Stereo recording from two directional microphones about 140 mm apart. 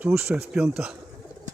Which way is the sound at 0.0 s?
5° right (ahead or behind).